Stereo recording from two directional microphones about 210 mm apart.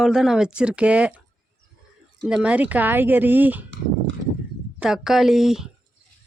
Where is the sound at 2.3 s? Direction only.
5° right (ahead or behind).